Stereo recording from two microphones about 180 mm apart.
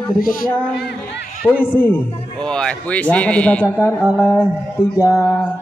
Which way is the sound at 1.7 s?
10° left (ahead or behind).